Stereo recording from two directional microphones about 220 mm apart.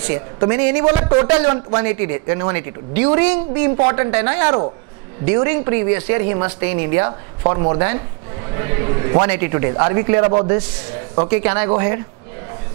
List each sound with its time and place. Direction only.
0.1 s a man's voice: 15° right (ahead or behind)